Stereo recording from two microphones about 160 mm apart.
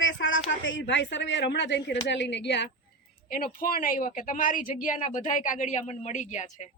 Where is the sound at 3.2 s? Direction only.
65° left (ahead or behind).